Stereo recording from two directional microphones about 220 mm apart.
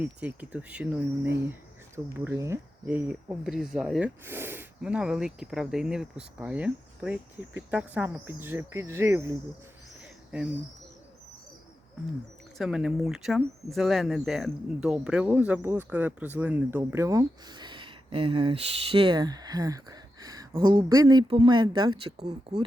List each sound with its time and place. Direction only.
0.0 s speech: 5° right (ahead or behind)
10.0 s a sound: 5° right (ahead or behind)
12.5 s speech: centre (ahead or behind); by 22.6 s 30° right (ahead or behind)